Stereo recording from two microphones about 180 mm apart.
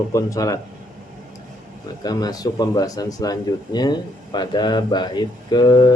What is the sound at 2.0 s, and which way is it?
Speech, 20° left (ahead or behind).